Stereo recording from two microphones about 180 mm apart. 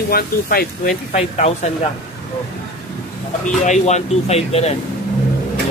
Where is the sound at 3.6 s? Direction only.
40° left (ahead or behind).